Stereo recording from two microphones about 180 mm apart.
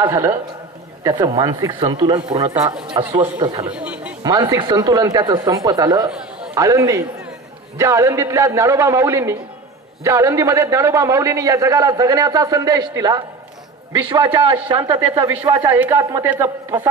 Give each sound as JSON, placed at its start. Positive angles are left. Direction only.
{"t": 0.1, "sound": "a man's voice", "side_deg": -15}
{"t": 3.7, "sound": "chatter", "side_deg": -5}
{"t": 4.2, "sound": "a man's voice", "side_deg": -20}